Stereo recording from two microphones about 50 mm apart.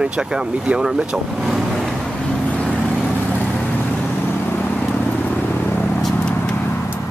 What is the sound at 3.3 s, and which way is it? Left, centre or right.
Vehicle, left.